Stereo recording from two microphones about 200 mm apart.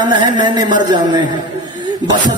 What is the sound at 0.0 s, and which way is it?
A man's voice, 20° right (ahead or behind).